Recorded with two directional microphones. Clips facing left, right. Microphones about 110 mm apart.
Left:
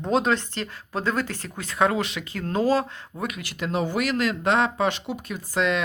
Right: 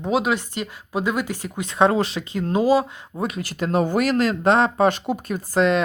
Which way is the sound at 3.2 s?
35° right (ahead or behind).